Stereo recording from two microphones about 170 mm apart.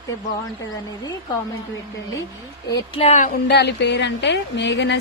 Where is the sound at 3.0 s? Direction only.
45° left (ahead or behind).